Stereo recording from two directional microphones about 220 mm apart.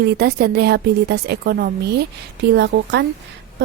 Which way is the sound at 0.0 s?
45° right (ahead or behind).